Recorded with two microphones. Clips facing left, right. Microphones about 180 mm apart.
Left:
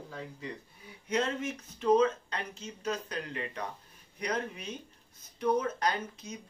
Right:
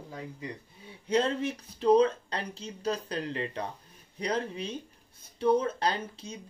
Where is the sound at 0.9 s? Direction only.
30° right (ahead or behind).